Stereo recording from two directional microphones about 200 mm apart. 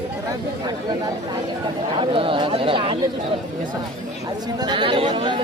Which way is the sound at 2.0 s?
25° right (ahead or behind).